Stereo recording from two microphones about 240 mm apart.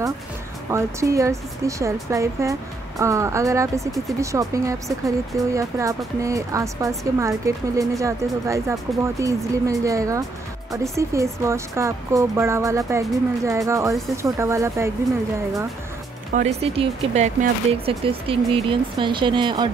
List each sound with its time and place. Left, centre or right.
0.7 s speech: centre
16.3 s speech: right